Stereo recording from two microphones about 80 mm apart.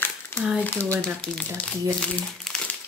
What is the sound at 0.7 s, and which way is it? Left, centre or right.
Speech, centre.